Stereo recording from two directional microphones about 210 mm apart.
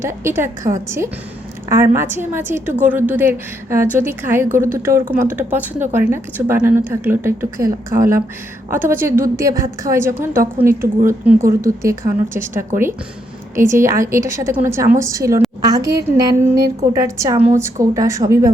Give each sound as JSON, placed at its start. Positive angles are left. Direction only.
{"t": 0.0, "sound": "a woman's voice", "side_deg": -10}